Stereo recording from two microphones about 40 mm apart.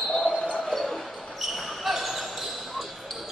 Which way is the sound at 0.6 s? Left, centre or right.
Centre.